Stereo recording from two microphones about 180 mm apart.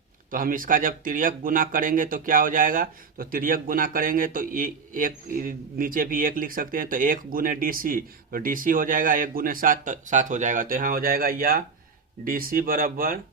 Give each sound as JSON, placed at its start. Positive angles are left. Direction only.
{"t": 0.3, "sound": "speech", "side_deg": -50}